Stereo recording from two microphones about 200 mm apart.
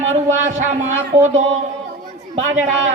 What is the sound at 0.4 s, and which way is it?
Speech, 40° right (ahead or behind).